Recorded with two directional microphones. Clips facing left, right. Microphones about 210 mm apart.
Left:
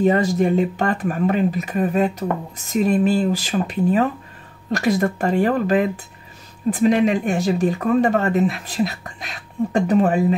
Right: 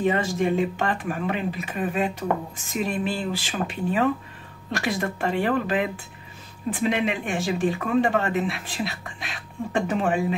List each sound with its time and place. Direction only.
0.0 s speech: 40° left (ahead or behind)